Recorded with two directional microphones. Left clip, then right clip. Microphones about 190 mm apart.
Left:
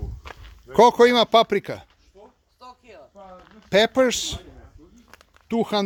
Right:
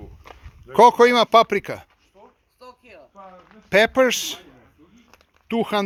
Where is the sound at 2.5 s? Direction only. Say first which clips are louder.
Even; 50° right (ahead or behind).